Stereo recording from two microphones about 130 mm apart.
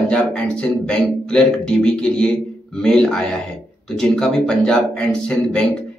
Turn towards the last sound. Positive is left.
turn(degrees=5)  # may be behind; listen again after turning